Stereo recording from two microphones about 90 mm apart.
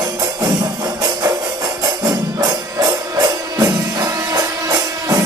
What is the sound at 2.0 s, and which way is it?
Music, 45° right (ahead or behind).